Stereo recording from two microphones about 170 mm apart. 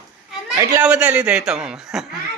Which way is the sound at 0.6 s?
20° right (ahead or behind).